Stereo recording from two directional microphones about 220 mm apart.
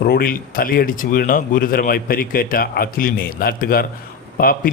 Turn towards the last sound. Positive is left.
turn(degrees=40)  # may be behind; listen again after turning